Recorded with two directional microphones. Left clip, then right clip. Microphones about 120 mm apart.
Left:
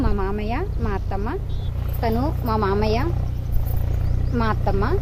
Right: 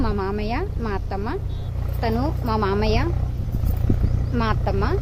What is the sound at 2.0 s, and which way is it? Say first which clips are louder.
A woman's voice: left 1 dB; 20° left (ahead or behind).